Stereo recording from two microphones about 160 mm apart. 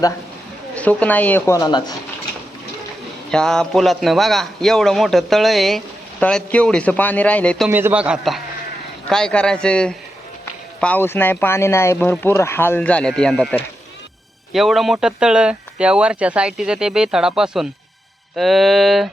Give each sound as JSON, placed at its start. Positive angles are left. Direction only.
{"t": 0.8, "sound": "speech", "side_deg": 10}
{"t": 1.5, "sound": "speech", "side_deg": 25}
{"t": 3.2, "sound": "speech", "side_deg": 5}
{"t": 7.7, "sound": "a man's voice", "side_deg": -15}